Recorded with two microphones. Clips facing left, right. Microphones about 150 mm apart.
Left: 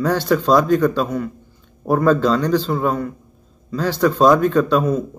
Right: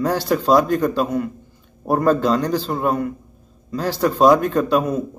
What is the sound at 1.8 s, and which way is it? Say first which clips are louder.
A man's voice: left 1 dB; 40° right (ahead or behind).